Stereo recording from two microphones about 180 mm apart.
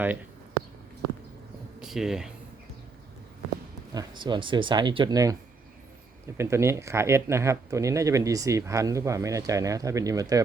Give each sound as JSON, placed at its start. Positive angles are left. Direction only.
{"t": 1.8, "sound": "speech", "side_deg": 0}
{"t": 3.9, "sound": "speech", "side_deg": -25}